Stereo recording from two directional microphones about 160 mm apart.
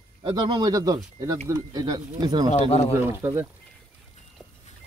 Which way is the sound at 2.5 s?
40° left (ahead or behind).